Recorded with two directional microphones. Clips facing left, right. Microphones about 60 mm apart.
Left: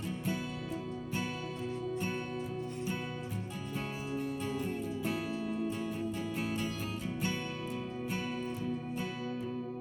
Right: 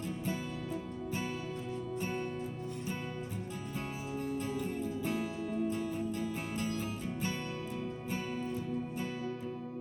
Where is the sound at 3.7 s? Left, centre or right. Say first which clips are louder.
Left 2 dB; left.